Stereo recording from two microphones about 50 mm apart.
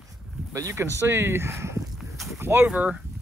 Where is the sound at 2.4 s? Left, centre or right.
Right.